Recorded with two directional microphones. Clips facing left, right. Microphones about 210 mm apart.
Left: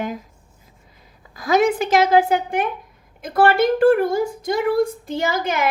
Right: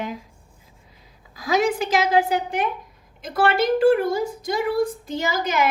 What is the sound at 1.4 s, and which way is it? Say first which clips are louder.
A woman's voice: left 4 dB; 55° left (ahead or behind).